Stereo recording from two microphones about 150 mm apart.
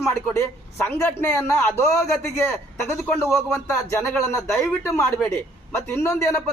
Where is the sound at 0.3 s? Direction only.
15° left (ahead or behind).